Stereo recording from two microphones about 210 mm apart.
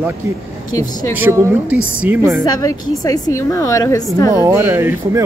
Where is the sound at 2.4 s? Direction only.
15° left (ahead or behind).